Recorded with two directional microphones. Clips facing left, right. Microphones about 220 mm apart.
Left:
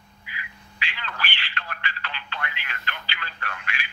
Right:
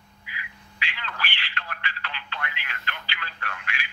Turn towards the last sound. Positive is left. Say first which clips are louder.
# left 1 dB
turn(degrees=30)  # may be behind; listen again after turning